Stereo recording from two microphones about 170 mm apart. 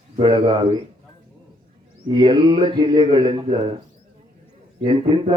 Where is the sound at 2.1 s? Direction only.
30° right (ahead or behind).